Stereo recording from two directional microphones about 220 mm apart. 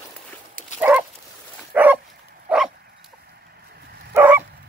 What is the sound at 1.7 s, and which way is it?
Dog, 5° right (ahead or behind).